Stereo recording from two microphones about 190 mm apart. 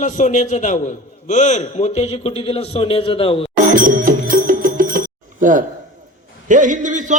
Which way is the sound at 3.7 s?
45° right (ahead or behind).